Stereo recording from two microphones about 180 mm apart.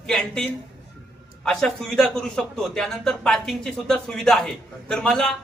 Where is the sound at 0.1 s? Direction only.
Centre (ahead or behind).